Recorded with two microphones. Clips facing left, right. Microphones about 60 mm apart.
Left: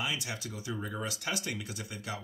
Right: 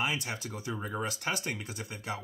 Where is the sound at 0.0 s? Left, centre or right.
Right.